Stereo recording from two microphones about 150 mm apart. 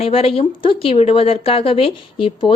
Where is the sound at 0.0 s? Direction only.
40° left (ahead or behind).